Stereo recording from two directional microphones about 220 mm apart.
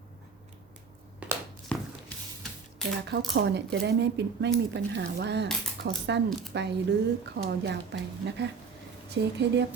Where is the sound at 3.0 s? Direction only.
50° right (ahead or behind).